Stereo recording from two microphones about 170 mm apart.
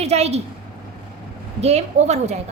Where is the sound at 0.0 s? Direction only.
40° right (ahead or behind).